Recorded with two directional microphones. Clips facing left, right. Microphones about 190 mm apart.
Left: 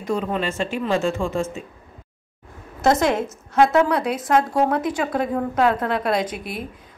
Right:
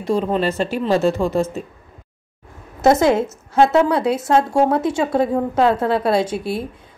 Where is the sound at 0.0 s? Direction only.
30° right (ahead or behind).